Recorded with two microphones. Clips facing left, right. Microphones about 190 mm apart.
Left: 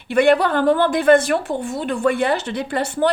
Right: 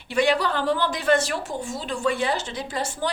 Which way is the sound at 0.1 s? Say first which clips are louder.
Left 7 dB; 55° left (ahead or behind).